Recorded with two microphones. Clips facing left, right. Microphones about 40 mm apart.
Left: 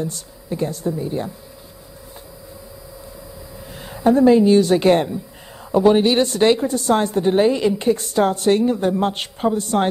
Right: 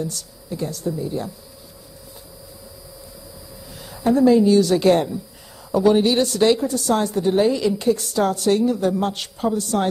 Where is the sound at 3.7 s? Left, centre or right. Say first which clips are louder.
Left 4 dB; left.